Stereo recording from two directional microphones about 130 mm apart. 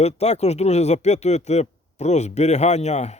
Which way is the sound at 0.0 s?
55° left (ahead or behind).